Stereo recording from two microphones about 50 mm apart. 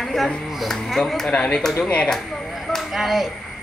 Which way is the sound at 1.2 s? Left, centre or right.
Left.